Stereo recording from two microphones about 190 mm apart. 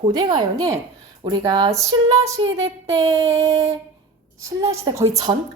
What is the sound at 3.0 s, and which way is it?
Speech, 15° right (ahead or behind).